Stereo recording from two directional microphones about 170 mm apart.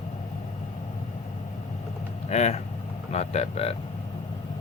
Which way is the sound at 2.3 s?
40° left (ahead or behind).